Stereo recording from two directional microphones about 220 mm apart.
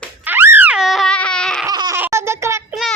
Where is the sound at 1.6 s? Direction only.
15° right (ahead or behind).